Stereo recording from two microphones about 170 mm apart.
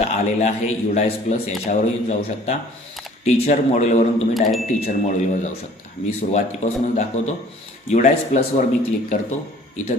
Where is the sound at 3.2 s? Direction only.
40° left (ahead or behind).